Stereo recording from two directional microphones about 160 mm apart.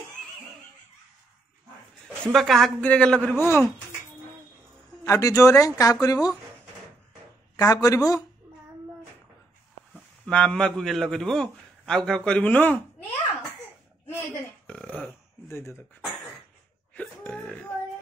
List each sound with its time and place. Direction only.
2.2 s a man's voice: centre (ahead or behind)
5.0 s speech: 20° left (ahead or behind)
7.5 s speech: 20° left (ahead or behind)
10.2 s a man's voice: 5° left (ahead or behind)
14.7 s burping: 5° left (ahead or behind)
15.4 s speech: 15° left (ahead or behind)
16.9 s a sound: 5° left (ahead or behind)